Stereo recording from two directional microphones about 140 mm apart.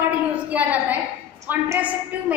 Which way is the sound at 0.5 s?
10° right (ahead or behind).